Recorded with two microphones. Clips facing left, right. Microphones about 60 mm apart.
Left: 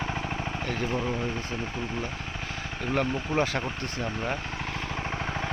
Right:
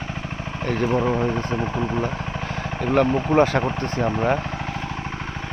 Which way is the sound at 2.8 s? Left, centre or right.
Right.